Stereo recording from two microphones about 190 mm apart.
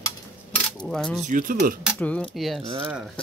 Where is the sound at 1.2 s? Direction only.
45° right (ahead or behind).